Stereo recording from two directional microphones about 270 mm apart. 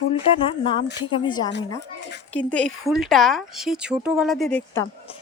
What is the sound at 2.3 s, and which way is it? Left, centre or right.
Speech, centre.